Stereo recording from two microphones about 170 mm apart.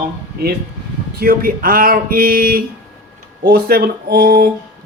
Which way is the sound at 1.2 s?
60° right (ahead or behind).